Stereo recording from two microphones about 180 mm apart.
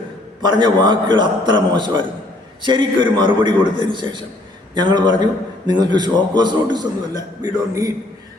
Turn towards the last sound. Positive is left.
turn(degrees=-20)  # may be behind; listen again after turning